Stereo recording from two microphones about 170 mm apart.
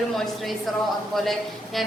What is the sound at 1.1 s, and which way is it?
Speech, centre (ahead or behind).